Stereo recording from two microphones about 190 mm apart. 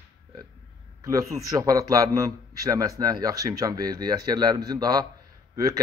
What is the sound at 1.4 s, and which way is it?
Speech, 15° right (ahead or behind).